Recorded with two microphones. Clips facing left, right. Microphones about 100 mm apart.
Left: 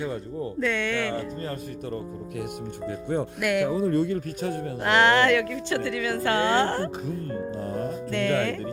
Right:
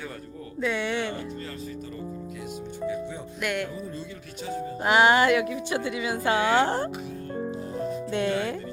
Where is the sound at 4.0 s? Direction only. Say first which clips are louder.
Left 11 dB; 55° left (ahead or behind).